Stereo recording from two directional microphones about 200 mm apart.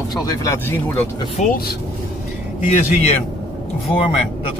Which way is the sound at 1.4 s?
45° left (ahead or behind).